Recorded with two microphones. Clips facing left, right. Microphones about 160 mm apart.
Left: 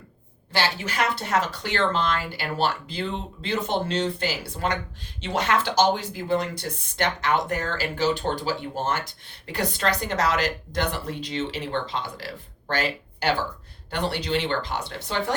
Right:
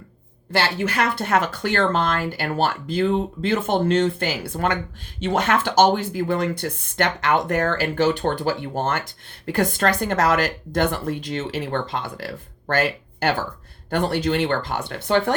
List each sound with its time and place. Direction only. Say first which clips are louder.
0.5 s speech: right 4 dB; 55° right (ahead or behind)